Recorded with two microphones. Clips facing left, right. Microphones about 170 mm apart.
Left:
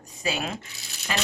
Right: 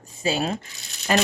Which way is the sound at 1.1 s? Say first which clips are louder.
Right 9 dB; 50° right (ahead or behind).